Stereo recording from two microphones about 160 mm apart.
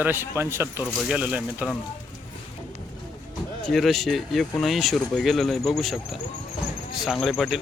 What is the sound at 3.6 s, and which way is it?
Speech, centre (ahead or behind).